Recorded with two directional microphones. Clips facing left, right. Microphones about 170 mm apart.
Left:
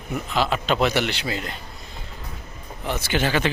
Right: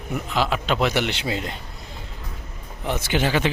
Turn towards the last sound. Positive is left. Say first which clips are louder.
# right 1 dB
turn(degrees=-15)  # may be behind; listen again after turning